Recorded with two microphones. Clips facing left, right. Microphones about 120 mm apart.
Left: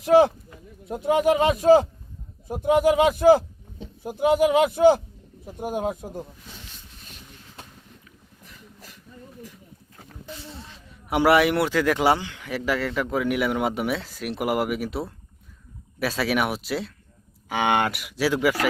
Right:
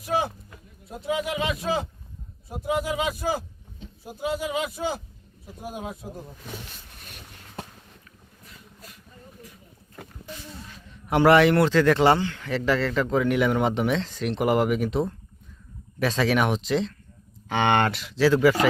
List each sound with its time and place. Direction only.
0.0 s a sound: 80° left
0.9 s speech: 60° left (ahead or behind)
2.6 s speech: 60° left (ahead or behind)
7.0 s vehicle: 60° right (ahead or behind)
10.4 s a sound: 25° left (ahead or behind)
11.1 s speech: 10° left (ahead or behind)